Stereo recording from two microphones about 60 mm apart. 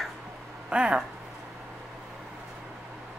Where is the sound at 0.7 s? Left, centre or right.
Centre.